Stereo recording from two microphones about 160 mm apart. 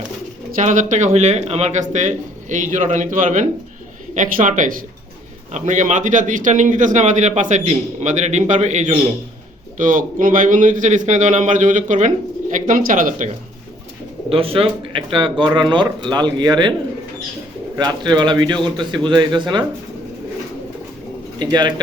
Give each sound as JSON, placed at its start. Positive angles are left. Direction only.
{"t": 0.5, "sound": "a man's voice", "side_deg": -50}
{"t": 14.3, "sound": "speech", "side_deg": -35}
{"t": 17.7, "sound": "speech", "side_deg": -25}
{"t": 21.3, "sound": "speech", "side_deg": -25}